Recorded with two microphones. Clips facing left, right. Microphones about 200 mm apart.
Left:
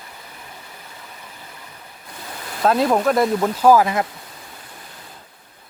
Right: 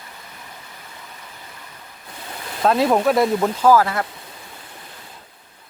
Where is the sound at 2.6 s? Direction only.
Centre (ahead or behind).